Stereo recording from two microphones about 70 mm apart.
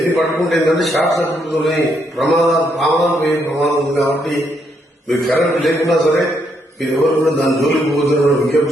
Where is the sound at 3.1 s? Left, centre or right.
Left.